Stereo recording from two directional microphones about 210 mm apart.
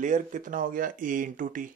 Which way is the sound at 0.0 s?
35° right (ahead or behind).